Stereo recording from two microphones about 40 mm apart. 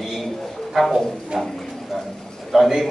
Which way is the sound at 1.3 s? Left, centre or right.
Centre.